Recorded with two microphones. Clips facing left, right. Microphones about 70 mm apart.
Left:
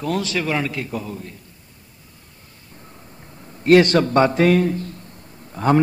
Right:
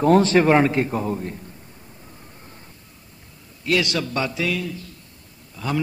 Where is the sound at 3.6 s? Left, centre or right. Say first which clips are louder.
Left 9 dB; left.